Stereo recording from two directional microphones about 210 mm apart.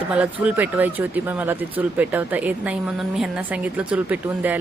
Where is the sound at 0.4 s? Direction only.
10° right (ahead or behind).